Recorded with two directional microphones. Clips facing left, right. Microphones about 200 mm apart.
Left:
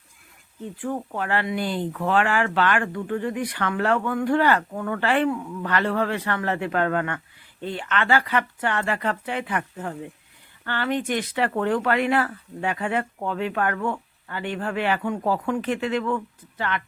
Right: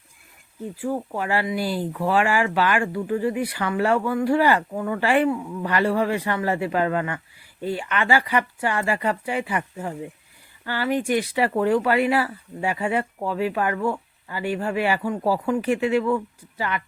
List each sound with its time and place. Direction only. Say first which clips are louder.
0.8 s speech: right 2 dB; 10° right (ahead or behind)